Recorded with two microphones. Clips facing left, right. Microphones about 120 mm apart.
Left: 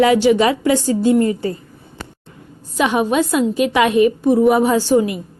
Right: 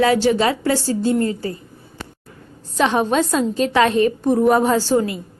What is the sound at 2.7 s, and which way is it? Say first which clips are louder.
A woman's voice: left 1 dB; 10° left (ahead or behind).